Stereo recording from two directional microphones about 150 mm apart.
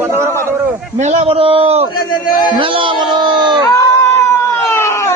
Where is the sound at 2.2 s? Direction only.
30° left (ahead or behind).